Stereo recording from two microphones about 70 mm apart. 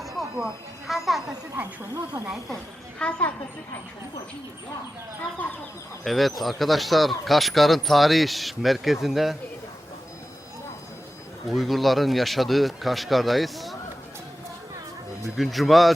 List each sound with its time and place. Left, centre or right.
0.2 s a sound: centre
0.9 s speech: centre
1.8 s speech: right
3.0 s a woman's voice: centre
6.1 s speech: centre
11.4 s speech: centre
15.4 s speech: centre